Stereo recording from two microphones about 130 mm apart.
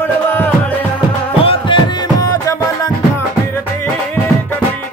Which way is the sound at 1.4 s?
40° left (ahead or behind).